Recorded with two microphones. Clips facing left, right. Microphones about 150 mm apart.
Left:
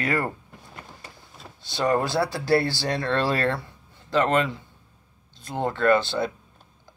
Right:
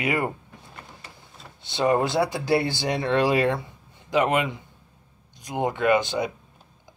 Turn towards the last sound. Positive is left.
turn(degrees=-15)  # may be behind; listen again after turning